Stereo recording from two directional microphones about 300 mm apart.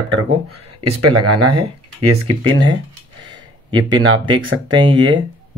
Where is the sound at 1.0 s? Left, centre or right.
Right.